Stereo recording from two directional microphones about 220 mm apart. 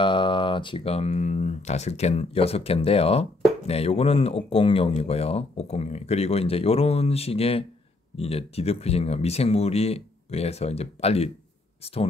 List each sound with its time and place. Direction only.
0.0 s speech: 20° left (ahead or behind)